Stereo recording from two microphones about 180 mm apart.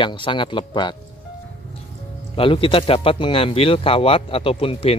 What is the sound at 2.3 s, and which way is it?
Speech, 30° left (ahead or behind).